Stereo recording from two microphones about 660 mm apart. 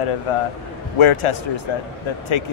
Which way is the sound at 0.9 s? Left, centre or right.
Left.